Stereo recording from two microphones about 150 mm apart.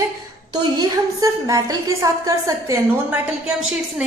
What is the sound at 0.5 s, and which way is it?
A woman's voice, 30° right (ahead or behind).